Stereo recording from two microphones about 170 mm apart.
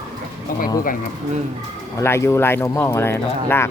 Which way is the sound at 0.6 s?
55° left (ahead or behind).